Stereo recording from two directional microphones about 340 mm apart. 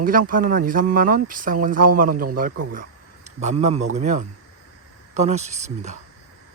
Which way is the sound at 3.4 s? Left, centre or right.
Centre.